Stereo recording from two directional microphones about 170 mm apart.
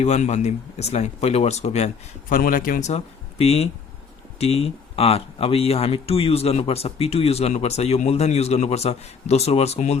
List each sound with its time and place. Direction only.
0.0 s speech: 40° left (ahead or behind)
2.3 s speech: 55° left (ahead or behind)
2.9 s speech: 40° left (ahead or behind)